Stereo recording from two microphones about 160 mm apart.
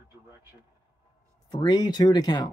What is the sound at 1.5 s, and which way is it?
Speech, 25° left (ahead or behind).